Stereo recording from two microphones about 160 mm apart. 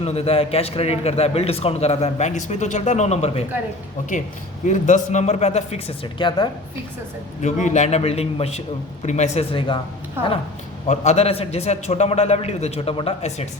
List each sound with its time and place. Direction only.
0.0 s a man's voice: 40° left (ahead or behind)
4.6 s a man's voice: 50° left (ahead or behind); by 6.5 s 30° left (ahead or behind)
7.4 s a man's voice: 50° left (ahead or behind)
10.2 s speech: 15° right (ahead or behind)
10.8 s a man's voice: 45° left (ahead or behind)